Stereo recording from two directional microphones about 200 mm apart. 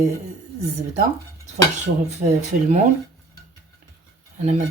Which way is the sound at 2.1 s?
35° right (ahead or behind).